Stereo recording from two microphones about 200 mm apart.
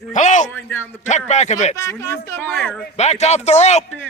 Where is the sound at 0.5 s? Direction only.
10° left (ahead or behind).